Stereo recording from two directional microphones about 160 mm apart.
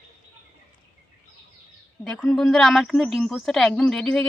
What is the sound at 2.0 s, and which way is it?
A woman's voice, 5° left (ahead or behind).